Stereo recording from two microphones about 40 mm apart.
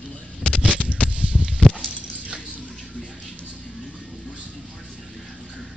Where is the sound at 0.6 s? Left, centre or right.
Right.